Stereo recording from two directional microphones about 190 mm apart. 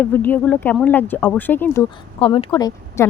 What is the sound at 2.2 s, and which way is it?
Speech, 25° left (ahead or behind).